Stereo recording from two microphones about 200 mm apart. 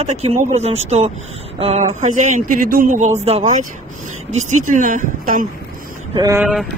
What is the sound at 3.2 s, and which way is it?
Speech, 30° right (ahead or behind).